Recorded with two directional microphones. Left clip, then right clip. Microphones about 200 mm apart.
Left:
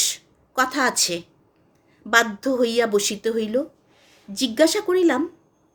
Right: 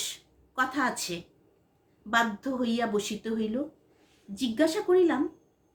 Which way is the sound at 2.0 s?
45° left (ahead or behind).